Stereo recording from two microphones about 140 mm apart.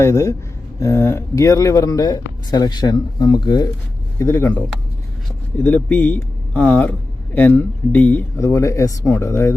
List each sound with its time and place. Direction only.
0.0 s speech: 20° left (ahead or behind)